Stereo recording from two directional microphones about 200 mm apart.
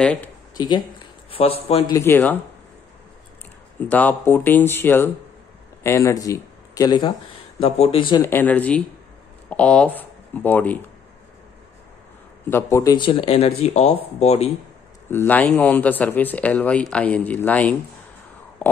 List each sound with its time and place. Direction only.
0.0 s speech: 5° left (ahead or behind)
0.6 s speech: 20° left (ahead or behind)
2.0 s speech: 10° left (ahead or behind)
3.9 s speech: 10° left (ahead or behind)
8.3 s speech: 10° left (ahead or behind)
12.4 s speech: 15° left (ahead or behind); by 14.5 s 35° left (ahead or behind)
15.0 s speech: 10° left (ahead or behind)